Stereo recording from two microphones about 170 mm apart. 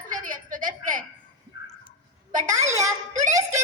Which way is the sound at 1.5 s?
90° left.